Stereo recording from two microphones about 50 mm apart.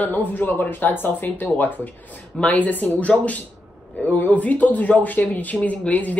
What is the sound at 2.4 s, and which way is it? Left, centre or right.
Speech, left.